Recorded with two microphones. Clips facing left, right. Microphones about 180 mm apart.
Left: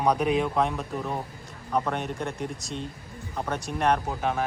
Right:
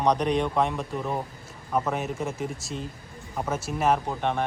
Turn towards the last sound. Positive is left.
turn(degrees=0)  # may be behind; listen again after turning